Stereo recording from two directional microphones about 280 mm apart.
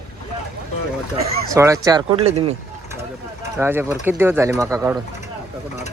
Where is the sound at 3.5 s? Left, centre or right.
Centre.